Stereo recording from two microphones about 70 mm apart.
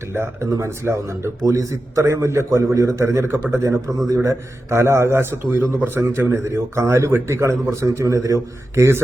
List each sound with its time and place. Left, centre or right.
0.5 s a man's voice: right
1.5 s a man's voice: right